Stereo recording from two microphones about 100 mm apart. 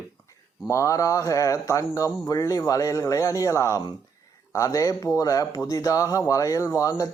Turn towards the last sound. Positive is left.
turn(degrees=30)  # may be behind; listen again after turning